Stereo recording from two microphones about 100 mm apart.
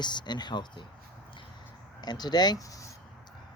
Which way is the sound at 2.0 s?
45° left (ahead or behind).